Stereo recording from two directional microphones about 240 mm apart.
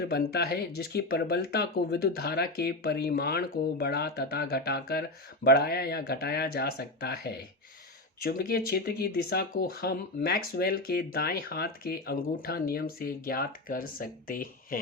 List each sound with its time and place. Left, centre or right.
0.0 s speech: left